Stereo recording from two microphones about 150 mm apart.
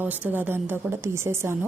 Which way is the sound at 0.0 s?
10° right (ahead or behind).